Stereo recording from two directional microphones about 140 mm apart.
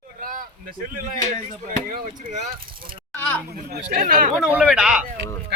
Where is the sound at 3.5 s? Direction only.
85° right.